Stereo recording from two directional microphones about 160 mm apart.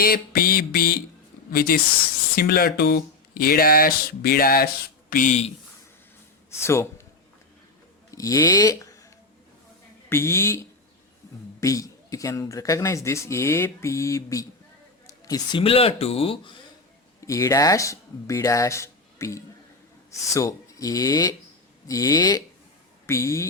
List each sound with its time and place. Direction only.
0.0 s speech: 70° left (ahead or behind); by 5.5 s 50° left (ahead or behind)
6.6 s speech: 15° left (ahead or behind)
8.1 s speech: 20° left (ahead or behind)
10.1 s speech: 15° left (ahead or behind)
11.6 s speech: 20° left (ahead or behind)
15.0 s a sound: 20° left (ahead or behind)
15.6 s speech: 35° left (ahead or behind)
17.2 s speech: 20° left (ahead or behind)